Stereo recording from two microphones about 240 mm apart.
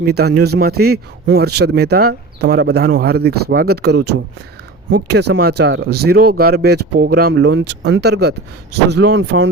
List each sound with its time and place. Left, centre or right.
0.1 s speech: right